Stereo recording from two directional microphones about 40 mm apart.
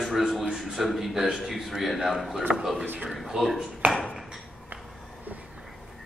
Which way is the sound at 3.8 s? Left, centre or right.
Right.